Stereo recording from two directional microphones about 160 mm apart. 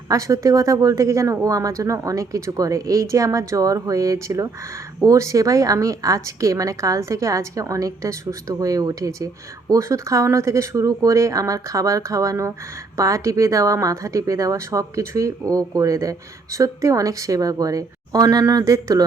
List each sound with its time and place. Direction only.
0.1 s speech: 20° right (ahead or behind)